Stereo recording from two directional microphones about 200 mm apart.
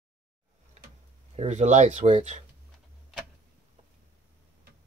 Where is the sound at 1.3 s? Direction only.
35° right (ahead or behind).